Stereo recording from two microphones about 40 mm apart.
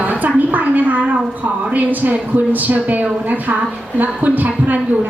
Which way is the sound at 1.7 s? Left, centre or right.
Right.